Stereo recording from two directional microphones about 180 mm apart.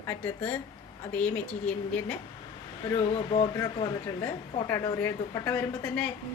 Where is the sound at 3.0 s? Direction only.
35° left (ahead or behind); by 5.6 s 15° left (ahead or behind).